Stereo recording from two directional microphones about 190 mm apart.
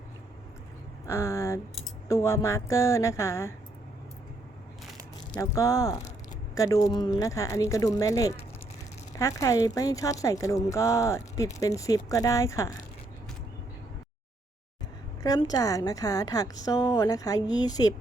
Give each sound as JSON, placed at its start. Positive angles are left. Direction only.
{"t": 1.0, "sound": "speech", "side_deg": 15}
{"t": 5.3, "sound": "speech", "side_deg": 15}
{"t": 15.2, "sound": "a woman's voice", "side_deg": 20}